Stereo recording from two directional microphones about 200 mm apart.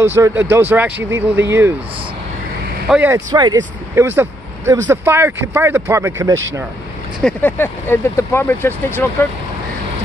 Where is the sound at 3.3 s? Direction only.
20° right (ahead or behind).